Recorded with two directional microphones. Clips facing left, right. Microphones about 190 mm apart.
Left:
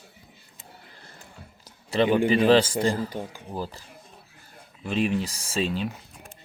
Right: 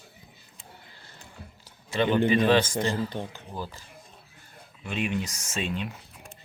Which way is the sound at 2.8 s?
35° left (ahead or behind).